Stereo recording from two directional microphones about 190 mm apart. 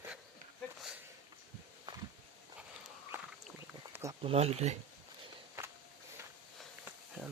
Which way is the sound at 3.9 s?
15° right (ahead or behind).